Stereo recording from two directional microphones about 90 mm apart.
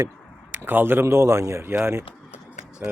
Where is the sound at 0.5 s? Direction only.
25° right (ahead or behind).